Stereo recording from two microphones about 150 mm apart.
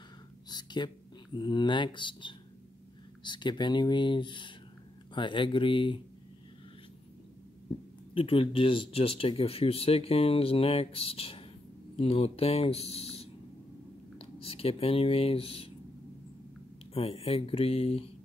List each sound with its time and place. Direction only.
0.5 s speech: 30° left (ahead or behind)
8.1 s speech: 35° left (ahead or behind)
16.9 s speech: 40° left (ahead or behind)